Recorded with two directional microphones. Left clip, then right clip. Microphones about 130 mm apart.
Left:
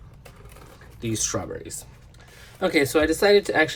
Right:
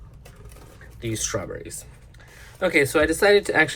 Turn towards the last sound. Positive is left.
turn(degrees=10)  # may be behind; listen again after turning